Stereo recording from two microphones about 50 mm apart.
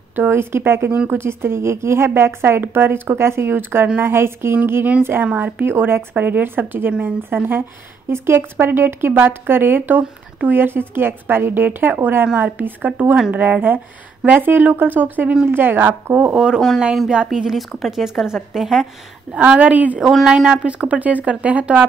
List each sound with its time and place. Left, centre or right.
0.1 s a woman's voice: right
5.2 s speech: right
5.7 s a woman's voice: right
6.9 s speech: right
7.2 s a woman's voice: right
8.1 s a woman's voice: right
16.3 s speech: centre
19.3 s speech: right
20.0 s speech: centre
20.2 s speech: centre